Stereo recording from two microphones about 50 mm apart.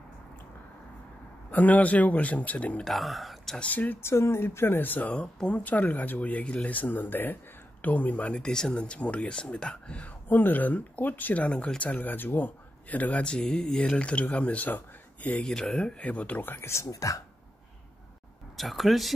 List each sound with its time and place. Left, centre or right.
1.5 s speech: left
2.8 s speech: centre
3.7 s speech: left
4.0 s speech: left
5.1 s speech: centre
5.6 s speech: left
8.4 s speech: centre
10.2 s speech: left
11.4 s speech: left
13.3 s speech: centre
15.4 s speech: centre
16.0 s speech: left
16.5 s speech: left
18.6 s speech: centre